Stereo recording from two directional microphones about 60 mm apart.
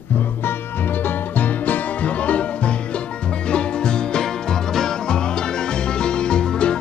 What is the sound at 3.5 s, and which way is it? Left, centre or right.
Music, centre.